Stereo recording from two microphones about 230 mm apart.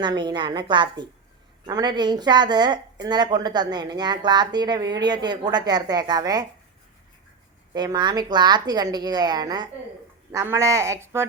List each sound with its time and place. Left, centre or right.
0.0 s a woman's voice: centre
7.7 s speech: centre